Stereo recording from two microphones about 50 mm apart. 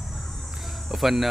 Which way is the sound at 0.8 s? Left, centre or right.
Centre.